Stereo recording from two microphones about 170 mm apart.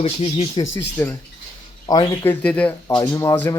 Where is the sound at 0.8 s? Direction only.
10° left (ahead or behind).